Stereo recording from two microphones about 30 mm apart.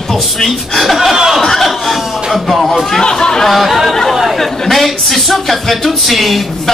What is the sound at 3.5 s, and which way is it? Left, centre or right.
A woman's voice, centre.